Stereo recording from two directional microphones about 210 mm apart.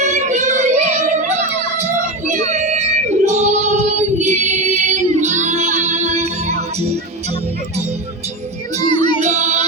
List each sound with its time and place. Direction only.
0.0 s child singing: 35° right (ahead or behind)
1.0 s a sound: 35° right (ahead or behind)
8.9 s music: 25° left (ahead or behind)
9.2 s music: 35° right (ahead or behind)